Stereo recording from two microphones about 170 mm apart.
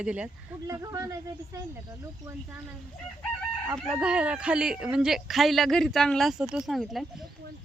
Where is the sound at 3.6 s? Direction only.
15° right (ahead or behind).